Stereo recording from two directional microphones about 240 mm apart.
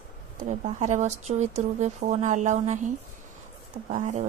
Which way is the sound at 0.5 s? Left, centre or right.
Right.